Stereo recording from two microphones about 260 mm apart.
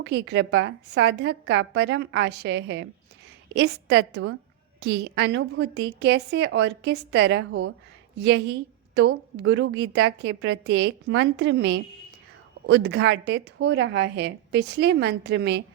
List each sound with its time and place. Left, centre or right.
0.0 s a woman's voice: right